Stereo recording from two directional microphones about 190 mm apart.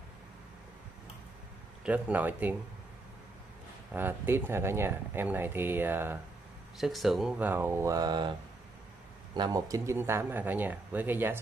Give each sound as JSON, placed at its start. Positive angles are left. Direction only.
{"t": 1.9, "sound": "speech", "side_deg": -10}
{"t": 3.9, "sound": "speech", "side_deg": -10}
{"t": 6.8, "sound": "speech", "side_deg": 0}
{"t": 9.3, "sound": "speech", "side_deg": -20}